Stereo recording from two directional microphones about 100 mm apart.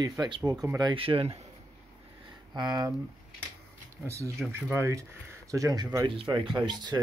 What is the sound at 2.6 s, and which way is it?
Speech, 45° right (ahead or behind).